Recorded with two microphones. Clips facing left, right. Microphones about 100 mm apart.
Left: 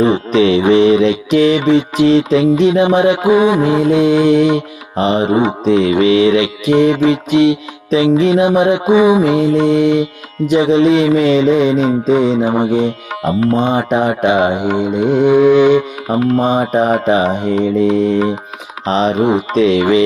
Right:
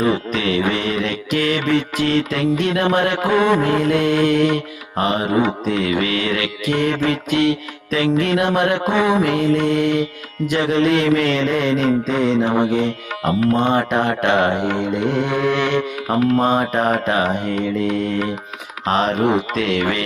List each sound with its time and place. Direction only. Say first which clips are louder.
0.0 s mantra: left 8 dB; 25° left (ahead or behind)
16.2 s mantra: left 3 dB; 25° left (ahead or behind)
19.5 s mantra: left 9 dB; 60° right (ahead or behind)